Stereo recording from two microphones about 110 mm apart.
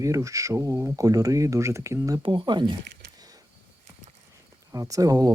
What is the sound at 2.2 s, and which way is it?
Speech, 50° right (ahead or behind).